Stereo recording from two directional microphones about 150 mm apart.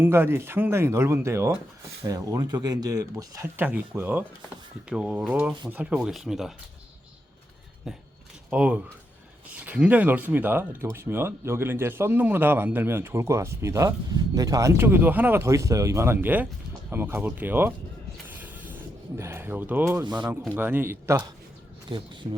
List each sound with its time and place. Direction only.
0.0 s speech: 15° right (ahead or behind)
7.9 s speech: centre (ahead or behind)
18.3 s rub: 10° right (ahead or behind)
20.1 s speech: 30° right (ahead or behind)
20.6 s speech: 15° right (ahead or behind)
21.8 s speech: 35° right (ahead or behind)